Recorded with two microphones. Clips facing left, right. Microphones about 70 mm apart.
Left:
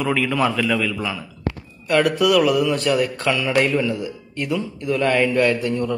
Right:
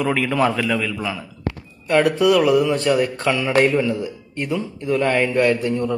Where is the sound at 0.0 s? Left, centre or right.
Right.